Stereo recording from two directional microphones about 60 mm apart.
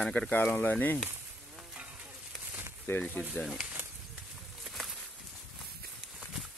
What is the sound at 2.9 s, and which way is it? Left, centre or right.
Speech, left.